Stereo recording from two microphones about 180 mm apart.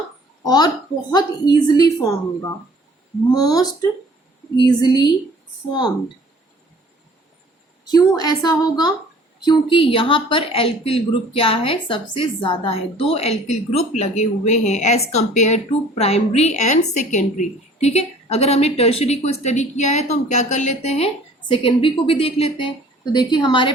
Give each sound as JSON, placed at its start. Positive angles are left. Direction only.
{"t": 0.4, "sound": "a woman's voice", "side_deg": 20}
{"t": 7.9, "sound": "a woman's voice", "side_deg": 20}